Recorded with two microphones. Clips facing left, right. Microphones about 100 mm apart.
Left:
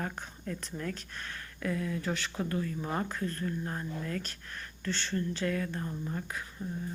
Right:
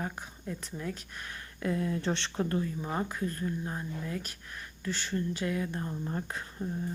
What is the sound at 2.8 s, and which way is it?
Speech, 10° right (ahead or behind).